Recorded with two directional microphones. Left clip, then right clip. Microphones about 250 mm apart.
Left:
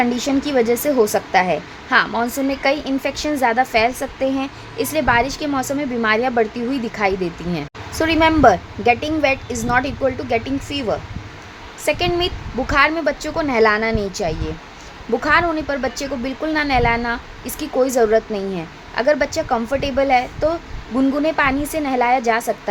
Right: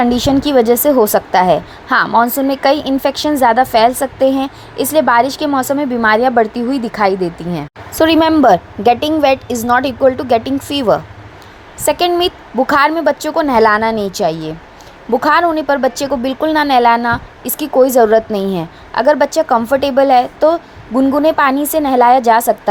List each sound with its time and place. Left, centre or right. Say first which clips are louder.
0.0 s a woman's voice: right 6 dB; centre